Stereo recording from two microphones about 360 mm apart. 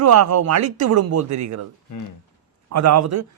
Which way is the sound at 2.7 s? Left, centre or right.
Right.